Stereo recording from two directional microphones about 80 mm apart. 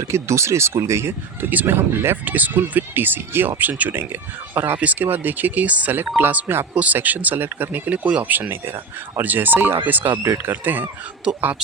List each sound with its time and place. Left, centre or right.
0.0 s speech: right
11.3 s speech: centre